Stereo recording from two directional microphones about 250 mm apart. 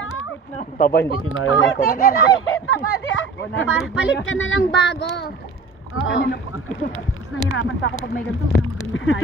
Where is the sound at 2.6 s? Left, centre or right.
Left.